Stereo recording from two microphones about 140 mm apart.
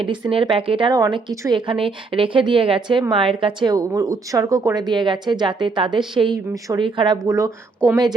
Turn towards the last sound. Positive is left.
turn(degrees=-20)  # may be behind; listen again after turning